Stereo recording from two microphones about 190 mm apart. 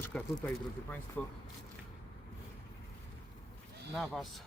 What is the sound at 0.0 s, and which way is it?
Speech, 10° left (ahead or behind).